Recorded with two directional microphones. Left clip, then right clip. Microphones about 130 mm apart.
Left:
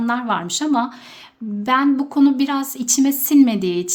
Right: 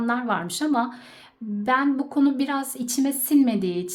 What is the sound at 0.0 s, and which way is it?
A woman's voice, 20° left (ahead or behind).